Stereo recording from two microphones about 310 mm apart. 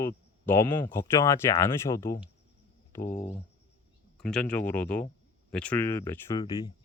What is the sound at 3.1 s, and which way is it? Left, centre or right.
Speech, left.